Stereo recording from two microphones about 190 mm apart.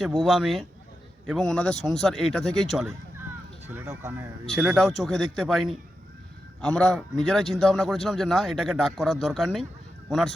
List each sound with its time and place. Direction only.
0.0 s a man's voice: centre (ahead or behind)
3.7 s speech: 10° right (ahead or behind)
4.4 s a man's voice: centre (ahead or behind)